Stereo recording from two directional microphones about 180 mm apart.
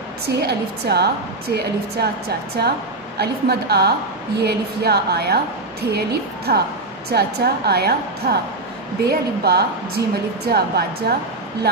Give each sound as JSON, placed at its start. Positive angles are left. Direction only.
{"t": 0.3, "sound": "a woman's voice", "side_deg": -65}